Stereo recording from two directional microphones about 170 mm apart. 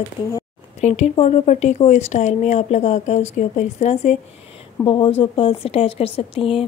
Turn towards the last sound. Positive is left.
turn(degrees=35)  # may be behind; listen again after turning